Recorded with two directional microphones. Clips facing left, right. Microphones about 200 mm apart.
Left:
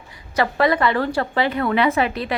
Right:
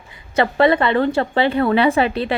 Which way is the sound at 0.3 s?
25° right (ahead or behind).